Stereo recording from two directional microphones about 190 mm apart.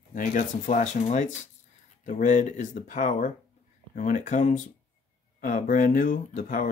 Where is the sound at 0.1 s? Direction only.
45° left (ahead or behind).